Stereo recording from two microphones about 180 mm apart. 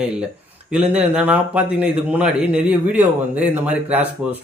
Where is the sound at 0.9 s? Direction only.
10° right (ahead or behind).